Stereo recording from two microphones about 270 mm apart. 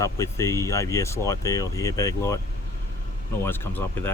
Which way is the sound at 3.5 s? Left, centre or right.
Centre.